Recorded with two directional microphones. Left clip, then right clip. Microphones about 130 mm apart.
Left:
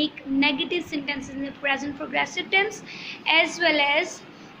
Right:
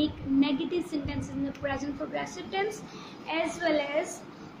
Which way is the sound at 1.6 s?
15° left (ahead or behind).